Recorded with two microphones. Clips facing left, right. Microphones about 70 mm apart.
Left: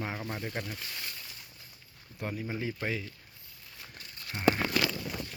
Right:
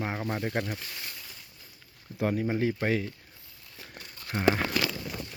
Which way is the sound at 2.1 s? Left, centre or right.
Right.